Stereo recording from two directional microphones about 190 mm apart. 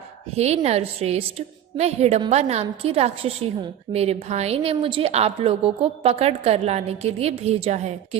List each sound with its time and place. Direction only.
0.3 s a woman's voice: 35° right (ahead or behind)